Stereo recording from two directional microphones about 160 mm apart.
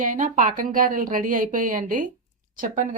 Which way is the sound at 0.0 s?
55° right (ahead or behind).